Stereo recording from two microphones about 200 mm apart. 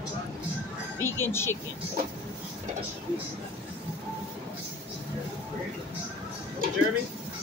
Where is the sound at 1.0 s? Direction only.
10° left (ahead or behind).